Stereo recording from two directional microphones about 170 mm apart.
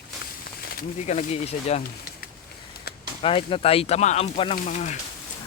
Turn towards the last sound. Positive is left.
turn(degrees=45)  # may be behind; listen again after turning